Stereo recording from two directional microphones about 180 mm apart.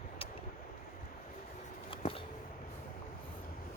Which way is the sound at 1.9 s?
30° left (ahead or behind).